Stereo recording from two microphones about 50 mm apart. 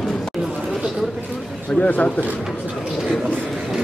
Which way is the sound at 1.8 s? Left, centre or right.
Left.